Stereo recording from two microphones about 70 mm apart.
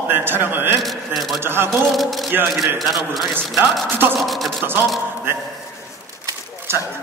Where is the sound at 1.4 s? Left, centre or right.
Right.